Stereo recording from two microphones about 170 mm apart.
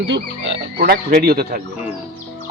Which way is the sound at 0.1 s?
90° right.